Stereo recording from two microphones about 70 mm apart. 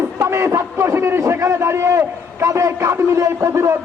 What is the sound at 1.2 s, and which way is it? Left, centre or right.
A man's voice, right.